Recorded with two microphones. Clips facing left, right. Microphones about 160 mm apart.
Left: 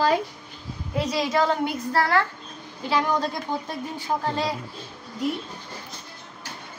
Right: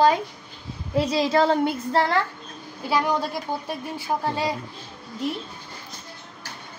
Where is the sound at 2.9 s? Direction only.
10° right (ahead or behind).